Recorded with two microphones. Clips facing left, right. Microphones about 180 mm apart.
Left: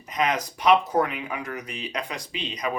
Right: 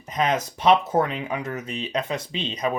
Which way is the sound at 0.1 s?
30° right (ahead or behind).